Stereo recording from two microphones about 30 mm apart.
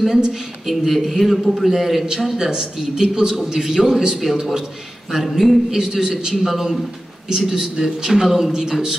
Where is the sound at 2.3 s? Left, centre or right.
Right.